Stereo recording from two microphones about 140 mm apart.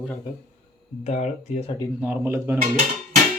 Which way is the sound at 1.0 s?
55° left (ahead or behind).